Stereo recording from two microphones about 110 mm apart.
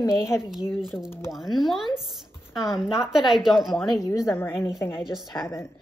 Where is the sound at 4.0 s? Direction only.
30° left (ahead or behind).